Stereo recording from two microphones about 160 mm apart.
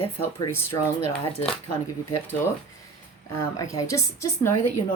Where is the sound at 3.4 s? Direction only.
20° left (ahead or behind).